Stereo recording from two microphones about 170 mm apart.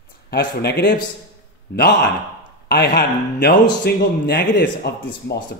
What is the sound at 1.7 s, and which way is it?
Speech, 70° left (ahead or behind).